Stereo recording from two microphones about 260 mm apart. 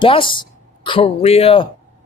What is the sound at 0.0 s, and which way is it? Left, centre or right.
A man's voice, centre.